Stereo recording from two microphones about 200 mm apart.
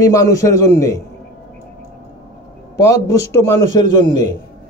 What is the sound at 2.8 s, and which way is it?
Speech, 15° left (ahead or behind).